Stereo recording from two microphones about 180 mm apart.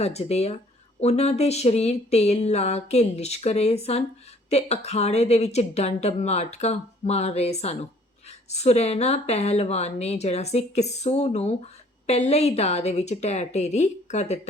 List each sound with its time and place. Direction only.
0.0 s a woman's voice: 35° left (ahead or behind)